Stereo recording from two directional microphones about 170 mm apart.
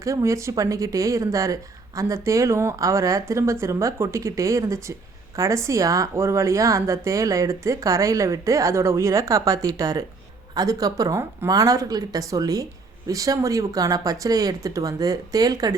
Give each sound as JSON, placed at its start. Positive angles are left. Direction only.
{"t": 0.0, "sound": "speech", "side_deg": -20}